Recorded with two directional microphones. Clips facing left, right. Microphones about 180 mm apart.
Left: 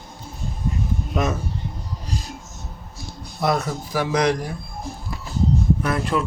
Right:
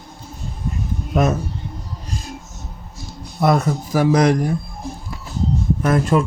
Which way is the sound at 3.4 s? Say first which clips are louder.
Right 5 dB; 50° right (ahead or behind).